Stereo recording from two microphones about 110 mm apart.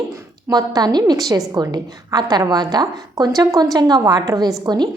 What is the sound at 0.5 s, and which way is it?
A woman's voice, 35° right (ahead or behind).